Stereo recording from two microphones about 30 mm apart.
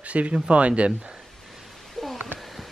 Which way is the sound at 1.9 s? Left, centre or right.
Centre.